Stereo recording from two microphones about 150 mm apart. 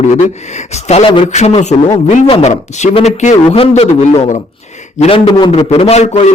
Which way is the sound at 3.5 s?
40° left (ahead or behind).